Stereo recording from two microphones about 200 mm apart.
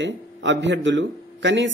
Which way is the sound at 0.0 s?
65° right (ahead or behind).